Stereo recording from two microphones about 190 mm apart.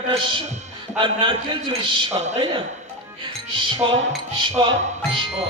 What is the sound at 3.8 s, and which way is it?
Speech, 25° right (ahead or behind).